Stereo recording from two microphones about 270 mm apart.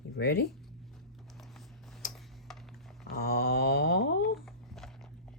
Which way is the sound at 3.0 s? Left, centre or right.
Left.